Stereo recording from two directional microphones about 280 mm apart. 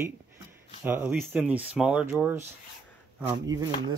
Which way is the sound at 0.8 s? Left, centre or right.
Centre.